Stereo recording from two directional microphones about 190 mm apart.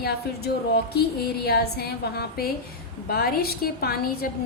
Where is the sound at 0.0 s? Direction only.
55° left (ahead or behind).